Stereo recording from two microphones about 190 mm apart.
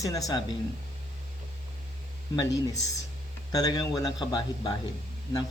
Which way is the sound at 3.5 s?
20° left (ahead or behind).